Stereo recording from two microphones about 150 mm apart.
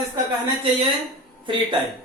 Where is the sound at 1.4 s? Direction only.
35° right (ahead or behind).